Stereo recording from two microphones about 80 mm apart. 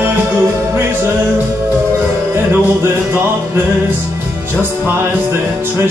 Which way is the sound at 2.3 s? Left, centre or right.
Right.